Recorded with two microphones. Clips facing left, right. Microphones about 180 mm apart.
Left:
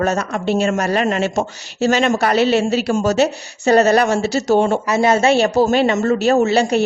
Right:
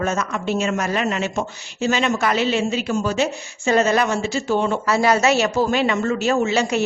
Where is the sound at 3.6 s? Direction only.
40° left (ahead or behind).